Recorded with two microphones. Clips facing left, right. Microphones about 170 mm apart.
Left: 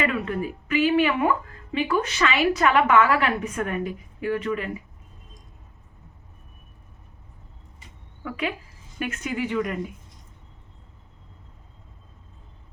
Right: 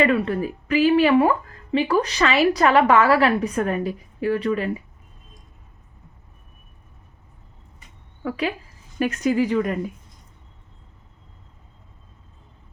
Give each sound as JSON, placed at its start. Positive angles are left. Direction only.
{"t": 0.0, "sound": "speech", "side_deg": -35}
{"t": 8.2, "sound": "speech", "side_deg": -35}